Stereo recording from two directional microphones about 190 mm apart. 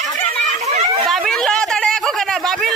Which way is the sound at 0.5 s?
35° right (ahead or behind).